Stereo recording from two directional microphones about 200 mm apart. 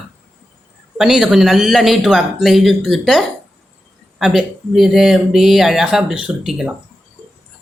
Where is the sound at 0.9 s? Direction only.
Centre (ahead or behind).